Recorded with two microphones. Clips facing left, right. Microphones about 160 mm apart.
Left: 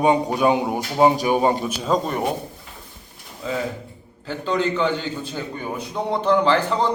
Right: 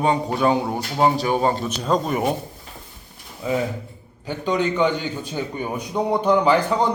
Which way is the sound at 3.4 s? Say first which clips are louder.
Right 3 dB; 15° right (ahead or behind).